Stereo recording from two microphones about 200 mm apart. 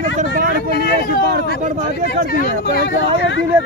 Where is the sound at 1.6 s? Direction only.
40° right (ahead or behind).